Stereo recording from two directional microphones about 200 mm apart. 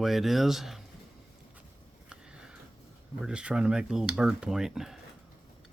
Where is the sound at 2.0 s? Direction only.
5° right (ahead or behind).